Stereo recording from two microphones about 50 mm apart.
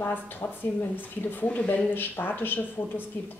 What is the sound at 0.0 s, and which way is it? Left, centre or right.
Speech, left.